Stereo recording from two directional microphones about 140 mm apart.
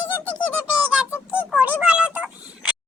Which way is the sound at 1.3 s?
10° right (ahead or behind).